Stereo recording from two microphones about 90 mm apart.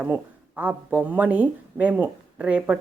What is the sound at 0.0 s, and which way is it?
Speech, 15° right (ahead or behind).